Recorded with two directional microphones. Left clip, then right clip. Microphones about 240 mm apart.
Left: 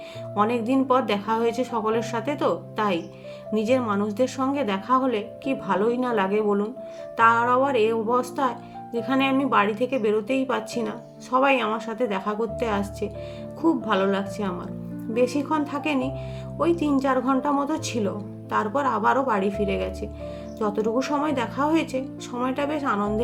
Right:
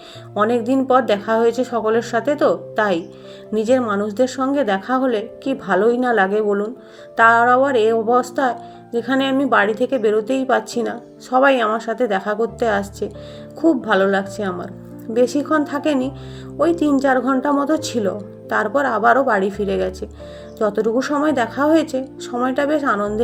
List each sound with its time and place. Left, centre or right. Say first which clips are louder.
0.3 s speech: right 5 dB; centre